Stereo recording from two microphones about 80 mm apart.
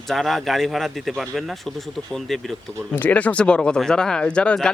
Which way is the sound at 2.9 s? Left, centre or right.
Left.